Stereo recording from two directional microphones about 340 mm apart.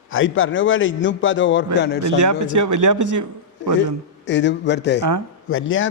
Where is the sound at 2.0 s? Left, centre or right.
Right.